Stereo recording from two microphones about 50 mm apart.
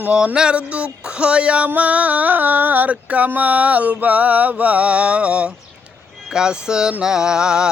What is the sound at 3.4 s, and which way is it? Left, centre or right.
Mantra, right.